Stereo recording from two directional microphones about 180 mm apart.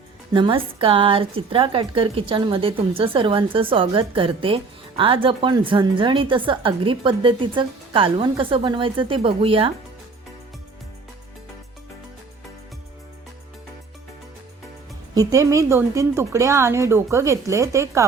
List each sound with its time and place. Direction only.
0.3 s a woman's voice: 30° right (ahead or behind)
15.1 s speech: 20° right (ahead or behind)